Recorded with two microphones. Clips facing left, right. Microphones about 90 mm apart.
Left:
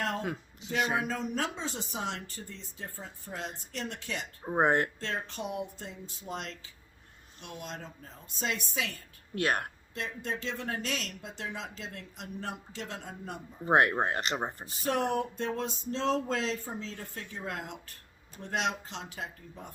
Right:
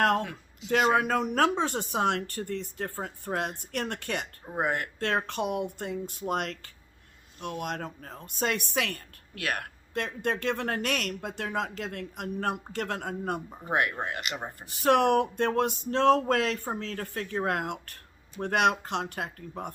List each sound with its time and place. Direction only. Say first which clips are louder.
0.7 s speech: right 7 dB; 65° right (ahead or behind)
4.4 s speech: left 5 dB; 30° left (ahead or behind)
4.9 s speech: right 8 dB; 60° right (ahead or behind)
9.3 s a woman's voice: left 3 dB; 30° left (ahead or behind)
9.9 s speech: right 7 dB; 60° right (ahead or behind)
13.7 s speech: left 4 dB; 35° left (ahead or behind)
14.8 s speech: right 7 dB; 70° right (ahead or behind)